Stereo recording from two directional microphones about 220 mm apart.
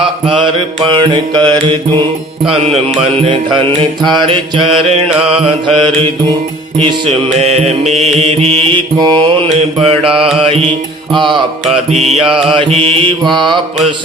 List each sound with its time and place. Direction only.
0.3 s mantra: 25° right (ahead or behind)
7.3 s mantra: 30° right (ahead or behind)
11.9 s mantra: 30° right (ahead or behind)